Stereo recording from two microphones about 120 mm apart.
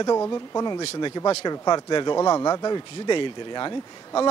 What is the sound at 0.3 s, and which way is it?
Speech, 30° left (ahead or behind).